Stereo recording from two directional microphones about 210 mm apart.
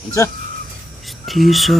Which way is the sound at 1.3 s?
Centre (ahead or behind).